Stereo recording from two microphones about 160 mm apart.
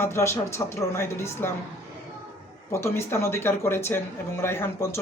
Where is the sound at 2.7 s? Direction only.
15° left (ahead or behind).